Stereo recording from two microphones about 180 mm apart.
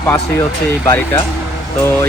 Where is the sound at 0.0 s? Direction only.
10° left (ahead or behind).